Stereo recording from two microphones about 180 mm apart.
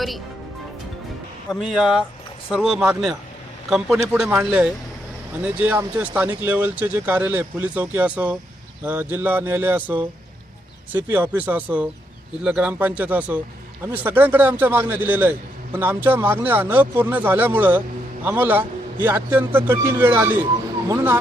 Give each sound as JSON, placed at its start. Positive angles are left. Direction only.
{"t": 1.5, "sound": "a man's voice", "side_deg": 0}